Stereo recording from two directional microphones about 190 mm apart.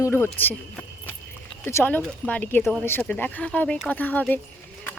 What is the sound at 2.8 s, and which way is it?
Speech, 10° left (ahead or behind).